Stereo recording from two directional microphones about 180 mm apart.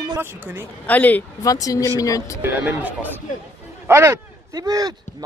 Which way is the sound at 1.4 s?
20° left (ahead or behind).